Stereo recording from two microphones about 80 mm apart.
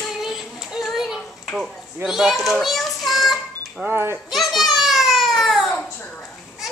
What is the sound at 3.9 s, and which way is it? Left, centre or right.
Speech, right.